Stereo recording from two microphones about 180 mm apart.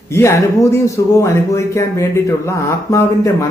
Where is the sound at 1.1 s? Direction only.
15° left (ahead or behind).